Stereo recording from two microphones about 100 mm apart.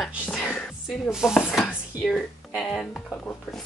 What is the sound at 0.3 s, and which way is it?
Music, 15° left (ahead or behind).